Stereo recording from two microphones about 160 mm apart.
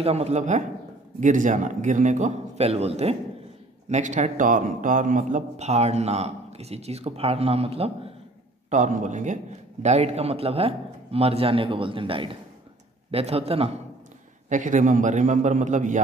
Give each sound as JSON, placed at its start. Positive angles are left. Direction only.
{"t": 0.0, "sound": "a man's voice", "side_deg": -40}
{"t": 8.6, "sound": "a man's voice", "side_deg": -50}
{"t": 14.5, "sound": "a man's voice", "side_deg": -50}